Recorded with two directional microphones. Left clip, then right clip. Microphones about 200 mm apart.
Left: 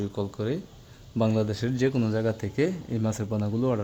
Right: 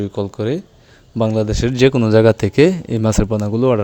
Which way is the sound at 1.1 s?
25° right (ahead or behind).